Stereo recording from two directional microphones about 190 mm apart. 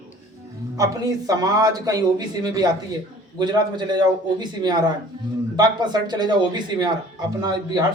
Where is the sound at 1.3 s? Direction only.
20° right (ahead or behind).